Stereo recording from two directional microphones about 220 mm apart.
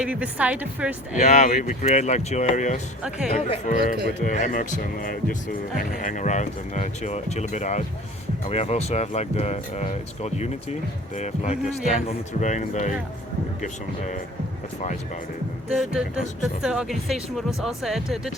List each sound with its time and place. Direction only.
0.0 s a woman's voice: 5° right (ahead or behind)
1.2 s speech: 35° left (ahead or behind)
15.7 s speech: 5° right (ahead or behind)